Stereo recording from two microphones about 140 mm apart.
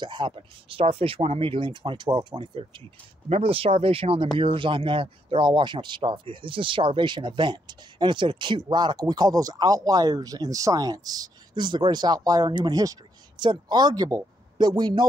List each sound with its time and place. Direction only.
0.0 s speech: 35° right (ahead or behind)
3.3 s speech: 45° right (ahead or behind)